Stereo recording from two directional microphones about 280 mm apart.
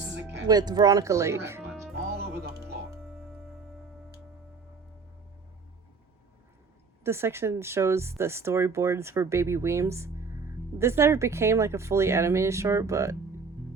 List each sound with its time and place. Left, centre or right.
0.4 s speech: centre
2.0 s music: right
7.0 s speech: centre